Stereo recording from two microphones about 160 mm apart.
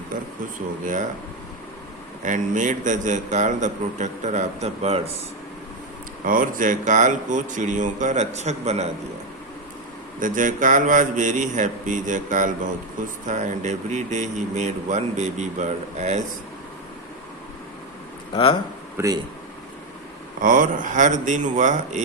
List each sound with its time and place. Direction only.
2.2 s speech: 50° right (ahead or behind)
6.2 s speech: 60° right (ahead or behind)
10.2 s speech: 55° right (ahead or behind)
18.9 s speech: 20° right (ahead or behind)
20.4 s speech: 55° right (ahead or behind)